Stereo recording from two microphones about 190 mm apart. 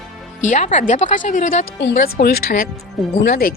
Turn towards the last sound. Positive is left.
turn(degrees=50)  # may be behind; listen again after turning